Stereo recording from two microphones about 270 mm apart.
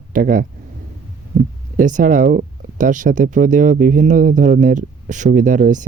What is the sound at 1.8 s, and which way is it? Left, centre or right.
Speech, right.